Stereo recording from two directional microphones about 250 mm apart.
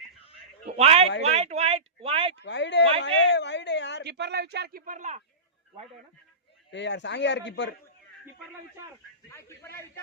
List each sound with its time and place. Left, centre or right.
0.6 s a sound: right
1.3 s speech: right
2.4 s a woman's voice: left
4.0 s speech: right
6.7 s a woman's voice: left